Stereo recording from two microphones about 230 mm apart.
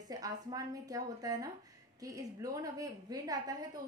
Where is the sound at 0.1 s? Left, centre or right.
Centre.